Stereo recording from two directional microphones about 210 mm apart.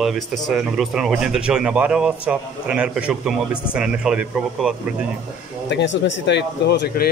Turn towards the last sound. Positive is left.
turn(degrees=55)  # may be behind; listen again after turning